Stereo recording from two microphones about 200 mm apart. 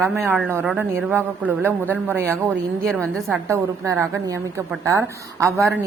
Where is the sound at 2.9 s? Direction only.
5° left (ahead or behind).